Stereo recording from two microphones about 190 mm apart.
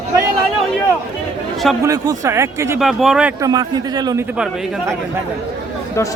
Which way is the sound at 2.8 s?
Centre (ahead or behind).